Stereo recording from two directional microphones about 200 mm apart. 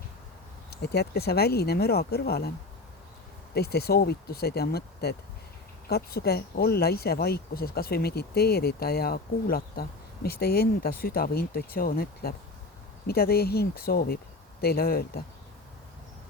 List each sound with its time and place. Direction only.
0.7 s speech: 55° left (ahead or behind)
3.5 s speech: 55° left (ahead or behind)